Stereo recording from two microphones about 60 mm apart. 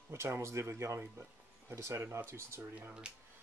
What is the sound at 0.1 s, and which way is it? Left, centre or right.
Speech, right.